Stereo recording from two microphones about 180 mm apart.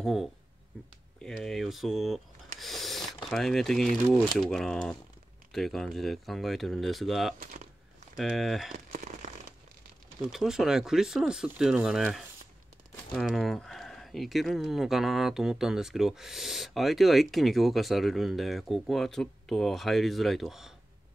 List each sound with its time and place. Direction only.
0.0 s speech: centre (ahead or behind)
8.7 s a sound: 45° right (ahead or behind)
10.3 s speech: centre (ahead or behind)